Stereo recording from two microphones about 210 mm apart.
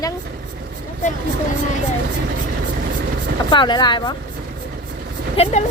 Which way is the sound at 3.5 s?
20° left (ahead or behind).